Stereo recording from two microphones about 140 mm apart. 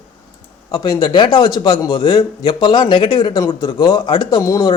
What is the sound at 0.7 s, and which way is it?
A man's voice, 30° left (ahead or behind).